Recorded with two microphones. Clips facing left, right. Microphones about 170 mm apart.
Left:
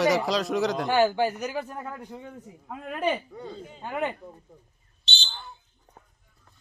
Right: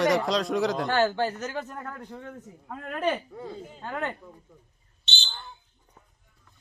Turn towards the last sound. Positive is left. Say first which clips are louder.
# even
turn(degrees=0)  # may be behind; listen again after turning